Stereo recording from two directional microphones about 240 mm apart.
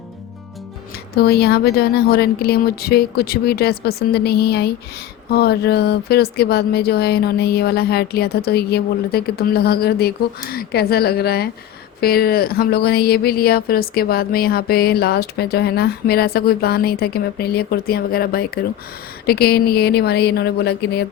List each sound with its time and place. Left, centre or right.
1.1 s speech: left